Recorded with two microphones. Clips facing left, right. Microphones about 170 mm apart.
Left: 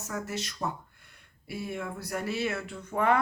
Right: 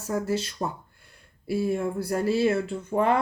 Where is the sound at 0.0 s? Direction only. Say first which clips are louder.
Right 8 dB; 30° right (ahead or behind).